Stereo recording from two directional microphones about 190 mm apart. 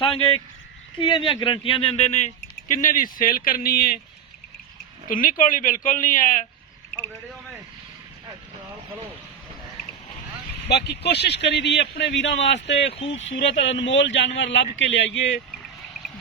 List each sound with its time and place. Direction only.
0.0 s speech: 25° left (ahead or behind); by 4.0 s 50° left (ahead or behind)
5.0 s speech: 45° left (ahead or behind)
10.7 s a man's voice: 60° left (ahead or behind)
12.9 s speech: 30° left (ahead or behind)
13.7 s a man's voice: 70° left (ahead or behind)